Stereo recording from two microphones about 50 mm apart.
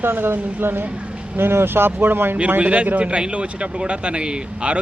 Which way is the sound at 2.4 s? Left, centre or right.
Right.